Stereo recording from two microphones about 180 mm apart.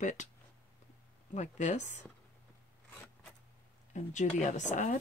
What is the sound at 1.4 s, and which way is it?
Speech, 40° left (ahead or behind).